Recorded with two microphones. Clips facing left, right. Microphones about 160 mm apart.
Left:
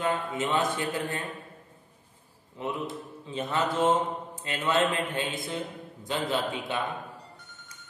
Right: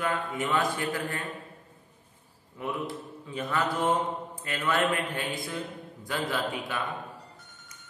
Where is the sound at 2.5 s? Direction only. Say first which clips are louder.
Even; 25° left (ahead or behind).